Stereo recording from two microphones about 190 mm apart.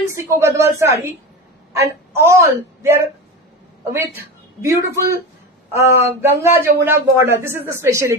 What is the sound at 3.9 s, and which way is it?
Speech, 15° right (ahead or behind).